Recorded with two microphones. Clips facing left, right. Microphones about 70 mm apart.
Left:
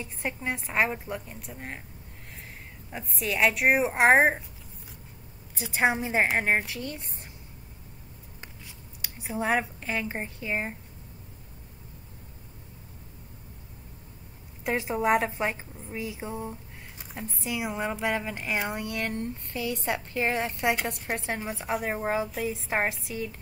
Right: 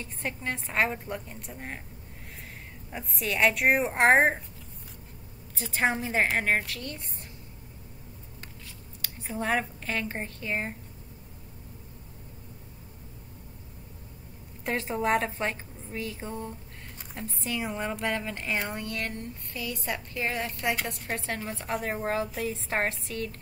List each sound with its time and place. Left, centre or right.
0.0 s a woman's voice: centre
2.9 s a woman's voice: centre
5.6 s a woman's voice: centre
9.2 s a woman's voice: centre
14.6 s a woman's voice: centre